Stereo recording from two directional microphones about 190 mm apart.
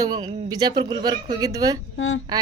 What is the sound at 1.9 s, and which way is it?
Speech, 85° left.